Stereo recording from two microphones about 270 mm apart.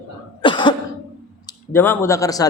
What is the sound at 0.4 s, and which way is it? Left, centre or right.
Cough, centre.